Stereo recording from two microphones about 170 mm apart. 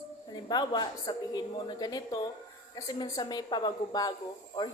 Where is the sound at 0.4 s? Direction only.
25° left (ahead or behind).